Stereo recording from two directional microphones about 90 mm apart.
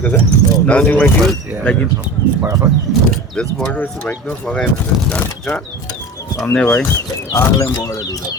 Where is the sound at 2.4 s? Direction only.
30° right (ahead or behind).